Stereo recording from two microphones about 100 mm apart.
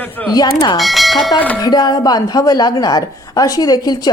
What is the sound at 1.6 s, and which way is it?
A woman's voice, 45° left (ahead or behind).